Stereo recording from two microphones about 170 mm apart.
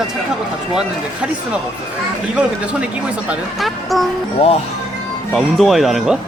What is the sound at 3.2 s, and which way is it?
Speech, centre (ahead or behind).